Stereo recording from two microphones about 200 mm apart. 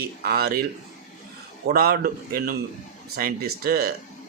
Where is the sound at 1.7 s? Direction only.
50° right (ahead or behind).